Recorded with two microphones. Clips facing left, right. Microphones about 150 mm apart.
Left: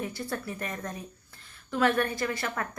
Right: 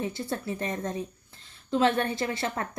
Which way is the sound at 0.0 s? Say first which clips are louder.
Right 2 dB; 25° right (ahead or behind).